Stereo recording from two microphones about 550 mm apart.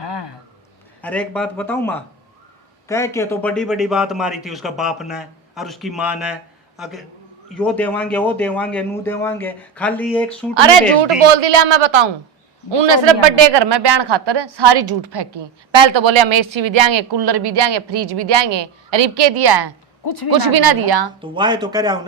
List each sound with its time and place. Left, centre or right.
0.0 s a sound: left
1.0 s a man's voice: centre
11.2 s a man's voice: right
20.1 s speech: left
20.3 s speech: right
21.2 s speech: centre